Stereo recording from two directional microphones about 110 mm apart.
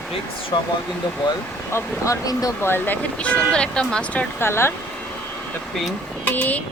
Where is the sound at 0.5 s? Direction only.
40° left (ahead or behind).